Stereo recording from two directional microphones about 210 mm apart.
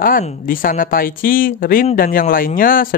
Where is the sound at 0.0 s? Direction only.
40° left (ahead or behind).